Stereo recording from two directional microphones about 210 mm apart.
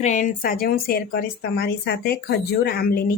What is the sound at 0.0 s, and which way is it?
Speech, 35° left (ahead or behind).